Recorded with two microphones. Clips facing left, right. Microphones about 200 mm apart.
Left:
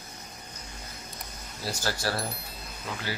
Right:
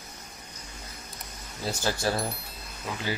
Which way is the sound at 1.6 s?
20° right (ahead or behind).